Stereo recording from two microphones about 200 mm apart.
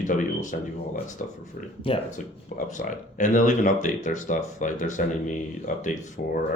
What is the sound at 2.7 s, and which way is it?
Speech, 40° left (ahead or behind).